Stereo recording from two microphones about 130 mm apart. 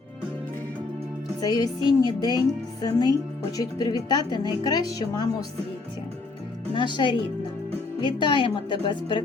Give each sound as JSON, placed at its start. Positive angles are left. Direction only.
{"t": 1.4, "sound": "speech", "side_deg": 30}
{"t": 6.7, "sound": "speech", "side_deg": 35}